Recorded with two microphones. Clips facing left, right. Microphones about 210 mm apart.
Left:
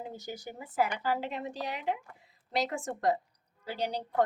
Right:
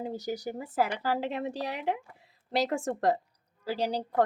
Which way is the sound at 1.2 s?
65° right (ahead or behind).